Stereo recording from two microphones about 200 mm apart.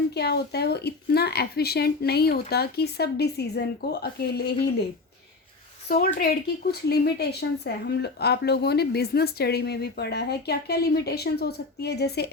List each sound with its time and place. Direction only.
0.1 s speech: 55° left (ahead or behind)
5.9 s speech: 50° left (ahead or behind)